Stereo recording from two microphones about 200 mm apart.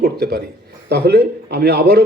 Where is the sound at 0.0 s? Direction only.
55° right (ahead or behind).